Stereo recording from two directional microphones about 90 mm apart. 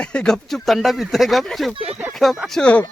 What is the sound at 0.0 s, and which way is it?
Speech, 10° left (ahead or behind).